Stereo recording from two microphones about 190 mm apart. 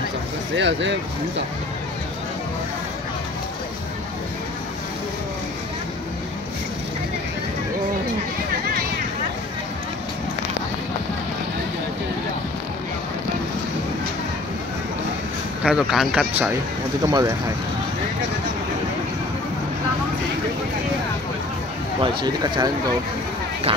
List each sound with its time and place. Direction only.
0.6 s speech: 70° right (ahead or behind)
15.6 s speech: centre (ahead or behind)
17.0 s speech: 15° right (ahead or behind)
22.0 s speech: 20° right (ahead or behind)